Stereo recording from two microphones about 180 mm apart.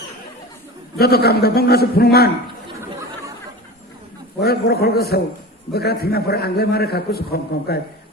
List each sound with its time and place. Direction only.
0.9 s a man's voice: 60° left (ahead or behind)
4.4 s a man's voice: 60° left (ahead or behind)